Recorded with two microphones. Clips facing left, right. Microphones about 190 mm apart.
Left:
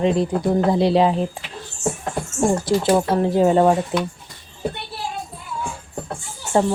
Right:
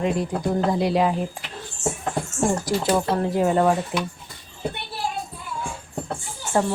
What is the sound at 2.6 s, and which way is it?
Speech, 25° left (ahead or behind).